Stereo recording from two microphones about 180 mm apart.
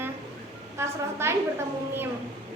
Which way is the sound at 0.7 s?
15° right (ahead or behind).